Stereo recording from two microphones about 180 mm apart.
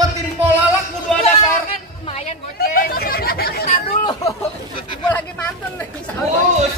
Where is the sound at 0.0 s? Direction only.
10° right (ahead or behind).